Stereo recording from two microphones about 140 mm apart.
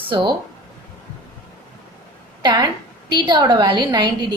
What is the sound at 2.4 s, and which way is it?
A woman's voice, 30° right (ahead or behind).